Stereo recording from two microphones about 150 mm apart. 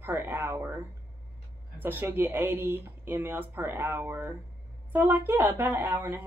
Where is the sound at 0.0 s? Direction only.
15° right (ahead or behind).